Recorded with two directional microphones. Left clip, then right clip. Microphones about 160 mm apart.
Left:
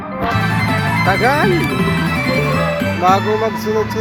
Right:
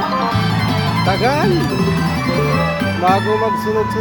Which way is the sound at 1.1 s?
Centre (ahead or behind).